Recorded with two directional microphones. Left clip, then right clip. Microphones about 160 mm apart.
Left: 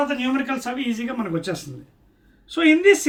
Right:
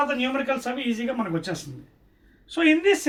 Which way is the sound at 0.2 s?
25° right (ahead or behind).